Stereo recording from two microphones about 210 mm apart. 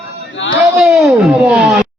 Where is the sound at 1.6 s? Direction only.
5° right (ahead or behind).